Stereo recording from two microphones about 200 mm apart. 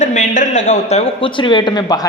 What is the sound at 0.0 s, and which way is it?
A man's voice, 40° left (ahead or behind).